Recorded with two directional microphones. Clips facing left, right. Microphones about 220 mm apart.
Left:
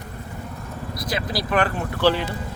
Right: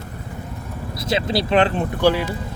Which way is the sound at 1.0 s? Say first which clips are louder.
Right 6 dB; 25° right (ahead or behind).